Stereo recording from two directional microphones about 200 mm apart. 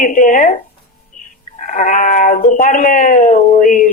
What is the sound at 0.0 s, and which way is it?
Speech, 40° left (ahead or behind).